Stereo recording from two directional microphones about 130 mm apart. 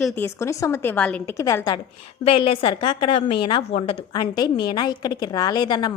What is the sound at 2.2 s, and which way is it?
A woman's voice, 45° left (ahead or behind).